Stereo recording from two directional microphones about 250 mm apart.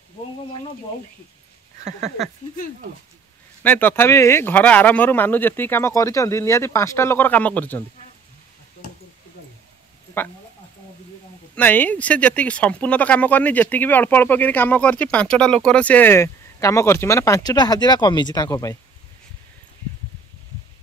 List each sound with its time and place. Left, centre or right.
1.9 s speech: right
3.6 s speech: centre
11.5 s speech: centre